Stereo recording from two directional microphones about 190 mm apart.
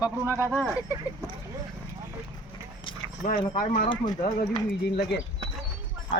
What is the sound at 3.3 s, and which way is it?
Speech, 45° left (ahead or behind).